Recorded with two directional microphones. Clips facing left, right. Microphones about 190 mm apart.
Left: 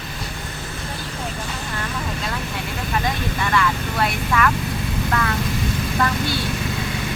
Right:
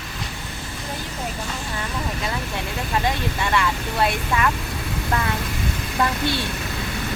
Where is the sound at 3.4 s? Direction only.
20° right (ahead or behind).